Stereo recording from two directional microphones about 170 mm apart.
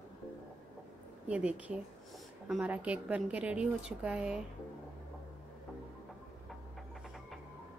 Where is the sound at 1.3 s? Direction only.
5° right (ahead or behind).